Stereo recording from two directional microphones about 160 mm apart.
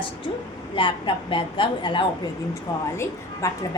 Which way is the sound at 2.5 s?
15° left (ahead or behind).